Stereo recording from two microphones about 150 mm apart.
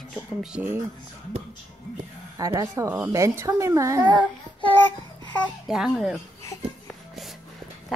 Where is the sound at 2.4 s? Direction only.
20° right (ahead or behind).